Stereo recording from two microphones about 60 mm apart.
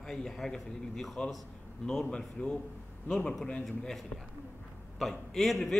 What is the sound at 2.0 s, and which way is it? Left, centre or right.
Speech, centre.